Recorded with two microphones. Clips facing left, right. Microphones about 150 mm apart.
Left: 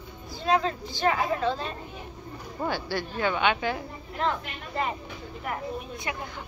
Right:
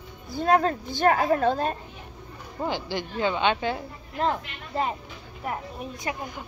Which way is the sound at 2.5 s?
15° right (ahead or behind).